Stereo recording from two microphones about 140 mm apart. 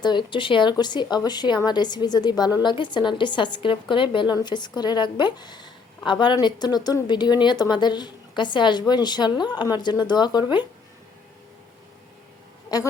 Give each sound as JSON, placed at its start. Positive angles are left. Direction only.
{"t": 0.0, "sound": "a woman's voice", "side_deg": 35}
{"t": 12.7, "sound": "a woman's voice", "side_deg": 25}